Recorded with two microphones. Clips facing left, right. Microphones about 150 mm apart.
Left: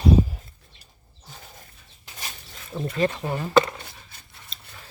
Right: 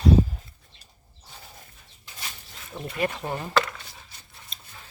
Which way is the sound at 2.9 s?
15° right (ahead or behind).